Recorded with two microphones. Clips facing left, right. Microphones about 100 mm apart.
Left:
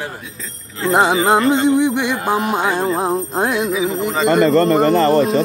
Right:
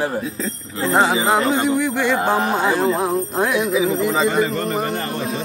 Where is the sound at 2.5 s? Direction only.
20° left (ahead or behind).